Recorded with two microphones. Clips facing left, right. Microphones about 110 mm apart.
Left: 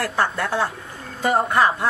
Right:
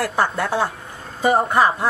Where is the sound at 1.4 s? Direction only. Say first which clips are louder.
Right 1 dB; 25° right (ahead or behind).